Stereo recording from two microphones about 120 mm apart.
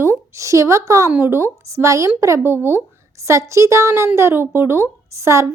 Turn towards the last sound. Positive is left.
turn(degrees=-25)  # may be behind; listen again after turning